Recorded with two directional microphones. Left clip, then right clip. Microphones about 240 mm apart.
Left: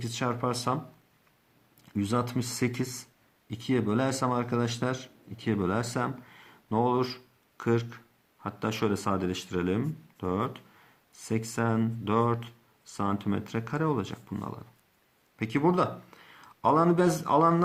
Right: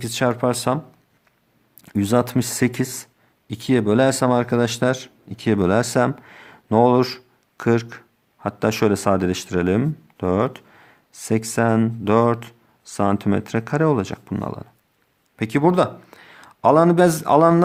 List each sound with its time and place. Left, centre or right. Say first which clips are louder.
0.0 s speech: right 10 dB; right
1.8 s speech: right 11 dB; right